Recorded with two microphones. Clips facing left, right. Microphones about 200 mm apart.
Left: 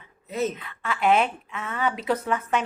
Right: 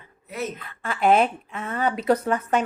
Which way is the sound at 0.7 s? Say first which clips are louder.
Right 5 dB; 40° right (ahead or behind).